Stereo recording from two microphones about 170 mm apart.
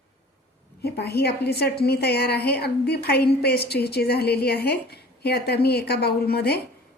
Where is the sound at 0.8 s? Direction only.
70° left (ahead or behind).